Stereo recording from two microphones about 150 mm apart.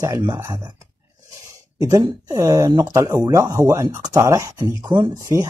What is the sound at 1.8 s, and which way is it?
Speech, 25° right (ahead or behind).